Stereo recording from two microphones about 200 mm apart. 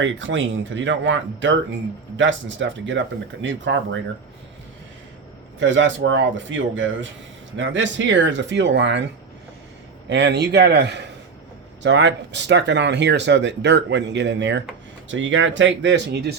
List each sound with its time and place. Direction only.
0.0 s speech: 65° right (ahead or behind)
5.5 s speech: 65° right (ahead or behind)
10.1 s speech: 60° right (ahead or behind)